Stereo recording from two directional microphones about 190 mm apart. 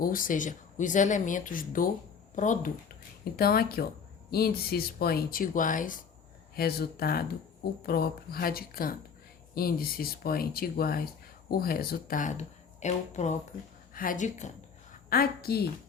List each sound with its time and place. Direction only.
0.0 s speech: 45° left (ahead or behind)
3.3 s speech: 55° left (ahead or behind)
15.1 s speech: 50° left (ahead or behind)